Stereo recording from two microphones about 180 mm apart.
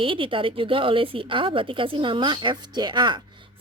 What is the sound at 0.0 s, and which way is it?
A woman's voice, 30° right (ahead or behind).